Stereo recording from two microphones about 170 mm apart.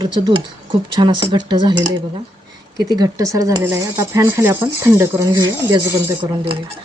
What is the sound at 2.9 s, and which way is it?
Speech, 20° right (ahead or behind).